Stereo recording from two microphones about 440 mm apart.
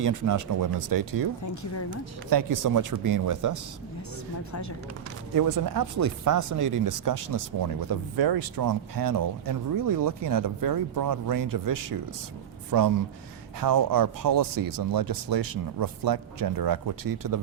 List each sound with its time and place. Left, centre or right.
0.0 s speech: right
2.3 s speech: right
5.4 s speech: right